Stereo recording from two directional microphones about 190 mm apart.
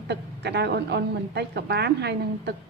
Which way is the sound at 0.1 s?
60° right (ahead or behind).